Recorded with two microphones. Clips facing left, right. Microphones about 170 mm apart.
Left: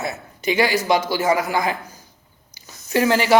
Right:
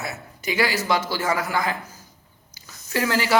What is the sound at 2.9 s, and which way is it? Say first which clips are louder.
Speech: left 5 dB; 20° left (ahead or behind).